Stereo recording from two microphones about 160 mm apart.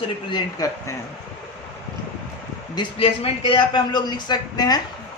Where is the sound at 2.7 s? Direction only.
35° left (ahead or behind).